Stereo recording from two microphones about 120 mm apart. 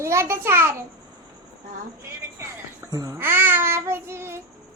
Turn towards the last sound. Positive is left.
turn(degrees=-20)  # may be behind; listen again after turning